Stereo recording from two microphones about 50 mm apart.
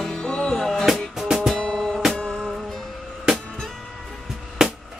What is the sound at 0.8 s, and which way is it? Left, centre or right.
Music, centre.